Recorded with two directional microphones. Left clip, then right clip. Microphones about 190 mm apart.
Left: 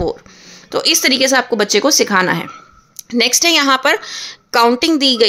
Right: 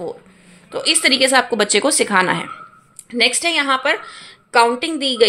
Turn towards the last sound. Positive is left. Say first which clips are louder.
# left 7 dB
turn(degrees=40)  # may be behind; listen again after turning